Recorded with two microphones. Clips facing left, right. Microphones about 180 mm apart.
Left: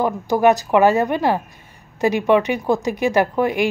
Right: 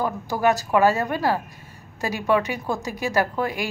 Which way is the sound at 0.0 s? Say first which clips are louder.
Left 6 dB; 20° left (ahead or behind).